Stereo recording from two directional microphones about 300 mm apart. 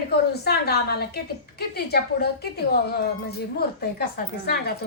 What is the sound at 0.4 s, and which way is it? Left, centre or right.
A woman's voice, left.